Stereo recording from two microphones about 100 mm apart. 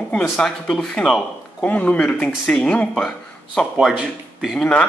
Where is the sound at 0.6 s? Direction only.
5° left (ahead or behind).